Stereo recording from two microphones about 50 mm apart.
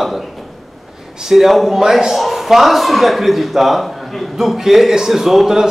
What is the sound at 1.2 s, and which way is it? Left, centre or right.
A man's voice, centre.